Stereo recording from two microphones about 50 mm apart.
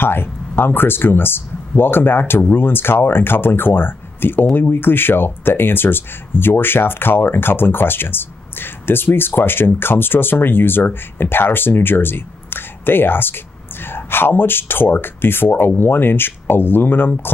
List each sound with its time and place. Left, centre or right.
0.0 s speech: left